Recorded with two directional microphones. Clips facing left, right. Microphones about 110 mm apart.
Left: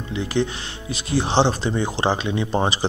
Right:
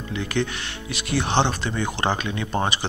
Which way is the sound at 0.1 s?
25° left (ahead or behind).